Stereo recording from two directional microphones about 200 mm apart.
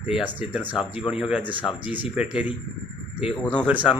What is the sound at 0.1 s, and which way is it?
Speech, 5° right (ahead or behind).